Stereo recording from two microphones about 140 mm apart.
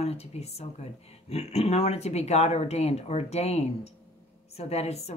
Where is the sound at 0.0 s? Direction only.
50° left (ahead or behind).